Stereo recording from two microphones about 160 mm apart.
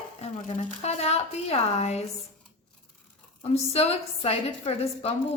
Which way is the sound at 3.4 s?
40° left (ahead or behind).